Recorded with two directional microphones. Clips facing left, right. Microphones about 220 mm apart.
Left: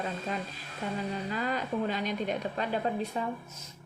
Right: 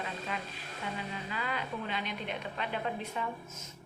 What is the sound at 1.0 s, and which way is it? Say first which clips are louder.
A woman's voice: left 6 dB; 40° left (ahead or behind).